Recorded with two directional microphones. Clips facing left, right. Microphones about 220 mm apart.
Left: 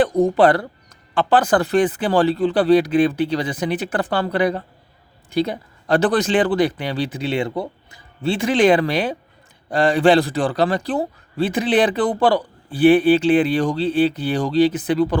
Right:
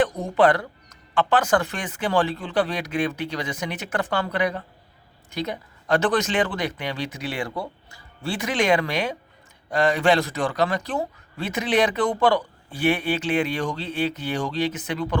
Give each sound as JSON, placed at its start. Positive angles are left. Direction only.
{"t": 0.0, "sound": "speech", "side_deg": 35}